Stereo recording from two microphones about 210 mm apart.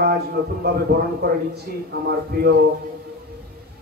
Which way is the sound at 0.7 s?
50° right (ahead or behind).